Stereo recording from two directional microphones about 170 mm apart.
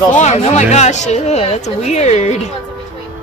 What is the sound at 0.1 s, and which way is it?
Speech, 45° left (ahead or behind).